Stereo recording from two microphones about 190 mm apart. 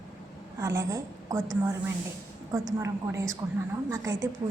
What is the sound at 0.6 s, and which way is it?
Speech, 15° right (ahead or behind).